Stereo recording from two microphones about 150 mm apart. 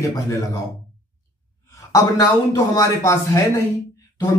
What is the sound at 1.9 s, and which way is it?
A man's voice, 20° left (ahead or behind).